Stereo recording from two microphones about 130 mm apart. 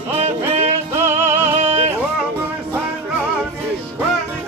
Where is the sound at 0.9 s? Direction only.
20° right (ahead or behind).